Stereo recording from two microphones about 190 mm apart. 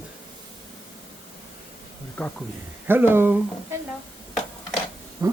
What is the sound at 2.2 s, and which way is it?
Speech, 5° left (ahead or behind).